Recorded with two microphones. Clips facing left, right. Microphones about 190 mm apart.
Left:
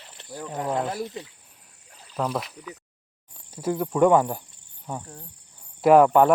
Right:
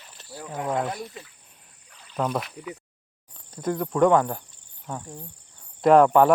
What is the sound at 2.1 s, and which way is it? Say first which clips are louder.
Speech: right 1 dB; centre (ahead or behind).